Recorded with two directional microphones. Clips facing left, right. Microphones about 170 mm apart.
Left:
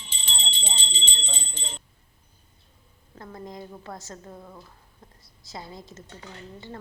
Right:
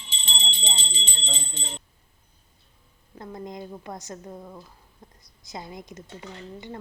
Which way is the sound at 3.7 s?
15° right (ahead or behind).